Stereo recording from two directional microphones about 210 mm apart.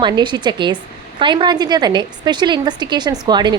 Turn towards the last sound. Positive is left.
turn(degrees=-20)  # may be behind; listen again after turning